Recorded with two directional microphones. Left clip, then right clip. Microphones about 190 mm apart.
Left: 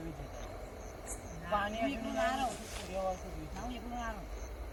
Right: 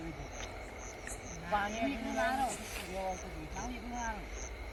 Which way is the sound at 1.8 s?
20° left (ahead or behind).